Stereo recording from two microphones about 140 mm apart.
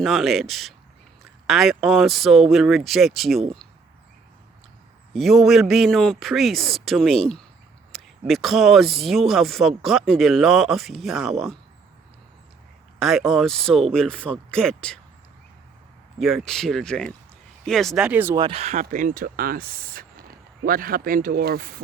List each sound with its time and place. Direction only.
0.0 s speech: centre (ahead or behind)
5.1 s speech: centre (ahead or behind)
13.0 s speech: centre (ahead or behind)
16.2 s speech: centre (ahead or behind)
18.3 s speech: 35° right (ahead or behind)
18.6 s speech: 55° right (ahead or behind); by 21.8 s 90° right